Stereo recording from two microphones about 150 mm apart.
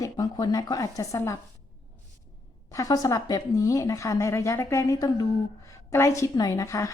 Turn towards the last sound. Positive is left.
turn(degrees=20)  # may be behind; listen again after turning